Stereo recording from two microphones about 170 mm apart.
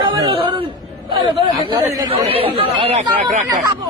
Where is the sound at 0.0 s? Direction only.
30° right (ahead or behind).